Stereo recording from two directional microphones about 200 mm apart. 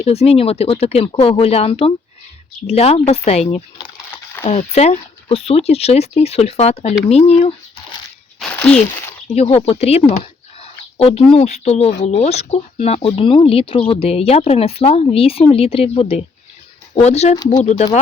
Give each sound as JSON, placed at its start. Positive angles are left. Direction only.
{"t": 0.0, "sound": "speech", "side_deg": 30}
{"t": 8.4, "sound": "a sound", "side_deg": 5}
{"t": 9.3, "sound": "speech", "side_deg": 30}
{"t": 10.6, "sound": "a sound", "side_deg": 30}
{"t": 11.3, "sound": "speech", "side_deg": 30}
{"t": 17.3, "sound": "speech", "side_deg": 20}
{"t": 17.6, "sound": "speech", "side_deg": 35}